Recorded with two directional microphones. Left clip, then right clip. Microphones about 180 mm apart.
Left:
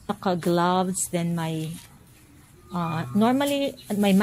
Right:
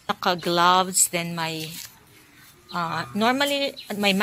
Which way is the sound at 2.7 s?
15° left (ahead or behind).